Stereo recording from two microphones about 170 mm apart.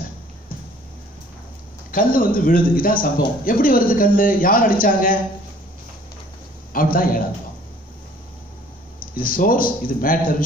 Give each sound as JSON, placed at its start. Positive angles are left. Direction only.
{"t": 1.9, "sound": "a man's voice", "side_deg": 55}
{"t": 6.7, "sound": "a man's voice", "side_deg": 55}
{"t": 9.0, "sound": "a man's voice", "side_deg": 55}